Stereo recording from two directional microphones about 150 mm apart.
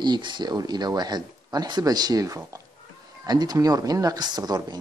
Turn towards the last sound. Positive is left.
turn(degrees=-25)  # may be behind; listen again after turning